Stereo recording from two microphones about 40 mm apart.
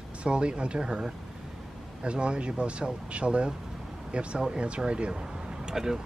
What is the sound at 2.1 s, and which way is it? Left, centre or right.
Speech, right.